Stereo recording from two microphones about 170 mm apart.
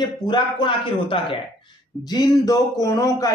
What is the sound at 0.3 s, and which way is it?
A man's voice, 30° left (ahead or behind).